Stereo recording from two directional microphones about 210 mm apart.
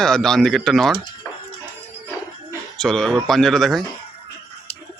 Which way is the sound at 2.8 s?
5° left (ahead or behind).